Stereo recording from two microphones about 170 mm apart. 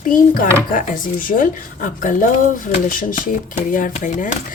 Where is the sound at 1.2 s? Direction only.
55° left (ahead or behind).